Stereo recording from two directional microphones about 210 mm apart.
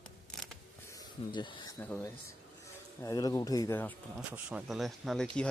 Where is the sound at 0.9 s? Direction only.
20° left (ahead or behind).